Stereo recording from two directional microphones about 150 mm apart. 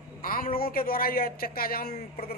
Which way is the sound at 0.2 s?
70° left (ahead or behind).